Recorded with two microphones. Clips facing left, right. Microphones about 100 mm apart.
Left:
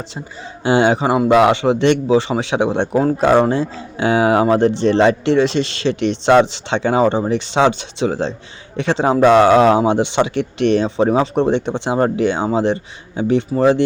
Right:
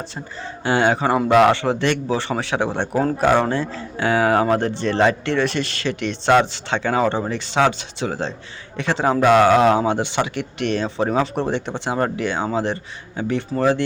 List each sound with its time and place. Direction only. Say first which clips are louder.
0.6 s a man's voice: left 4 dB; 20° left (ahead or behind)